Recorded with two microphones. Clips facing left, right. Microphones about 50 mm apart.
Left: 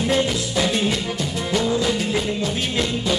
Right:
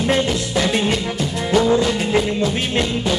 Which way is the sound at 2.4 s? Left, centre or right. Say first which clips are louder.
Right 3 dB; centre.